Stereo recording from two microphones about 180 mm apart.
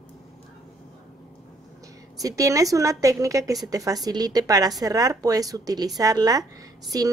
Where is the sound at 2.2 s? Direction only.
20° right (ahead or behind).